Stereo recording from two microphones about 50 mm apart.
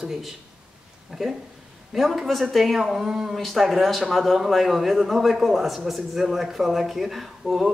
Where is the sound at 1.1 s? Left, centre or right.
Centre.